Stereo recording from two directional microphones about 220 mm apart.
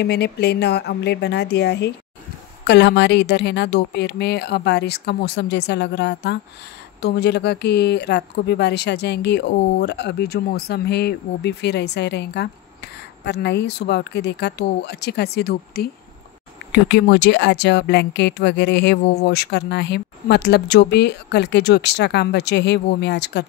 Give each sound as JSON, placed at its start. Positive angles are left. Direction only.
{"t": 0.0, "sound": "speech", "side_deg": 50}